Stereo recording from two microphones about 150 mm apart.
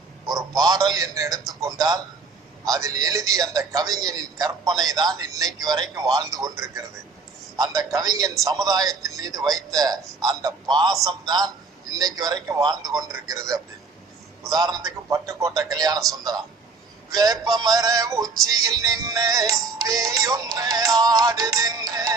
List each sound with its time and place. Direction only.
0.6 s music: 25° right (ahead or behind)
17.1 s music: 25° right (ahead or behind)